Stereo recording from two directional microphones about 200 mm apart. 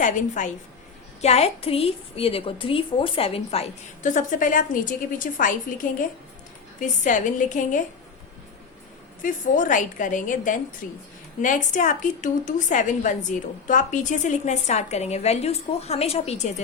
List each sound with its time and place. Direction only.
0.0 s a woman's voice: 40° left (ahead or behind)
9.2 s a woman's voice: 40° left (ahead or behind)